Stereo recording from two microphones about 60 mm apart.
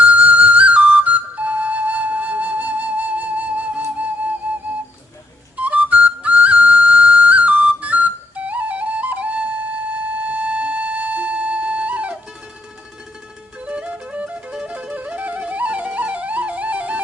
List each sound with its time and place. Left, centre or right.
0.0 s flute: right
5.5 s flute: right
10.2 s music: right
13.6 s music: right